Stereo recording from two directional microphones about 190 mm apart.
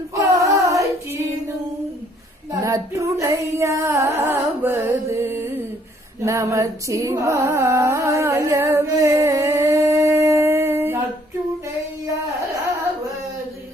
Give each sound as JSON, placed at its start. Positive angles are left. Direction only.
{"t": 0.1, "sound": "female singing", "side_deg": -15}
{"t": 2.5, "sound": "female singing", "side_deg": -15}
{"t": 6.2, "sound": "music", "side_deg": -15}